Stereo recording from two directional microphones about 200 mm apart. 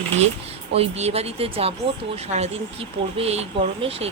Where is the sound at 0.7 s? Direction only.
30° right (ahead or behind).